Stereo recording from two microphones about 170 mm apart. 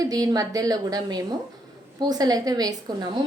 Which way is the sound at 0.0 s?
20° right (ahead or behind).